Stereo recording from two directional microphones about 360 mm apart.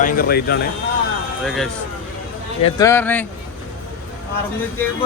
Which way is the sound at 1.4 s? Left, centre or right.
Centre.